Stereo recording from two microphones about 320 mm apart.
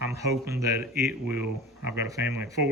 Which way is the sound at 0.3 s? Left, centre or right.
Centre.